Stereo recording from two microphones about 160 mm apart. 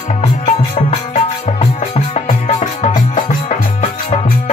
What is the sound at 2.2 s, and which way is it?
Music, 50° left (ahead or behind).